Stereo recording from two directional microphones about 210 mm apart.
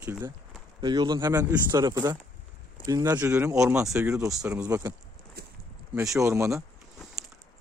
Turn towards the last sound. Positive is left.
turn(degrees=-15)  # may be behind; listen again after turning